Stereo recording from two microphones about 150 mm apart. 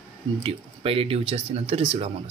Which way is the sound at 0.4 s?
40° right (ahead or behind).